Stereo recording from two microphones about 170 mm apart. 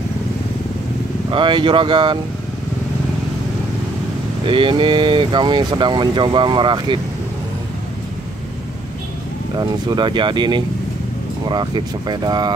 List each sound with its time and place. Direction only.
1.3 s speech: 30° right (ahead or behind)
4.5 s speech: 30° right (ahead or behind)
9.6 s speech: 25° right (ahead or behind)